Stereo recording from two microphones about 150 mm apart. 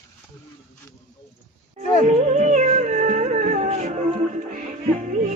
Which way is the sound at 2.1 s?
50° right (ahead or behind).